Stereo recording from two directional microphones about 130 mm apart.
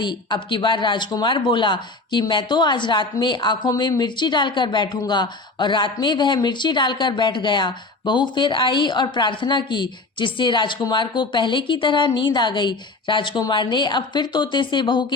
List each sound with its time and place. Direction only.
0.0 s speech: 35° left (ahead or behind)